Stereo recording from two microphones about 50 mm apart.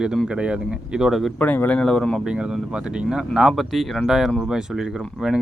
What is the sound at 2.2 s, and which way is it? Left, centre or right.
Speech, centre.